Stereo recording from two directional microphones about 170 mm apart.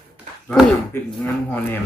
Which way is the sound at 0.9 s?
15° left (ahead or behind).